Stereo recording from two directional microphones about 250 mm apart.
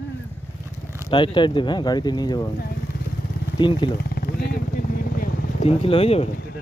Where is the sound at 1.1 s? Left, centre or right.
Centre.